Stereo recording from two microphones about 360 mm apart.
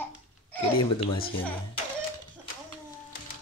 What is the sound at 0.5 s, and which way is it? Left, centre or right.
Speech, left.